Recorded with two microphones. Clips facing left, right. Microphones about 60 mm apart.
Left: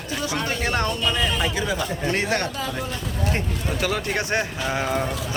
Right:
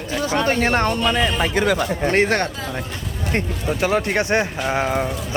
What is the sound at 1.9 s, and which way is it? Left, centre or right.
Speech, right.